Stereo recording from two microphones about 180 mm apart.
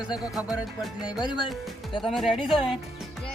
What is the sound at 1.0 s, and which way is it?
Speech, 25° left (ahead or behind).